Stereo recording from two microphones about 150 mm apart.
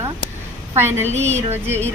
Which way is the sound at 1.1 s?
50° right (ahead or behind).